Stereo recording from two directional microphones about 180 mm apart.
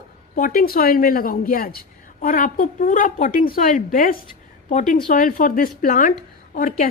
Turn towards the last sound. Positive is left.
turn(degrees=50)  # may be behind; listen again after turning